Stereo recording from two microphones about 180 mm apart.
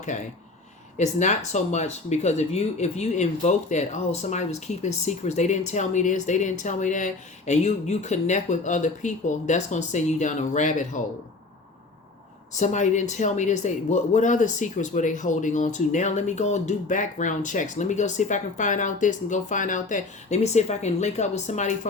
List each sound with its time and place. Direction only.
0.1 s speech: 40° left (ahead or behind)
12.5 s speech: 40° left (ahead or behind)